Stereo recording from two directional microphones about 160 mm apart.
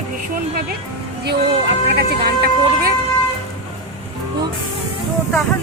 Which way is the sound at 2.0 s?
75° right (ahead or behind).